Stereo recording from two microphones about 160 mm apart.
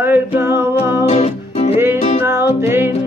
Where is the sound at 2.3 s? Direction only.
15° right (ahead or behind).